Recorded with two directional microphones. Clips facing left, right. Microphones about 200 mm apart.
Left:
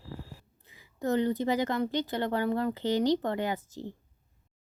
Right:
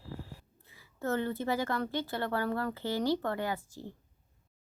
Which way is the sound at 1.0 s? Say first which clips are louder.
Left 5 dB; 15° left (ahead or behind).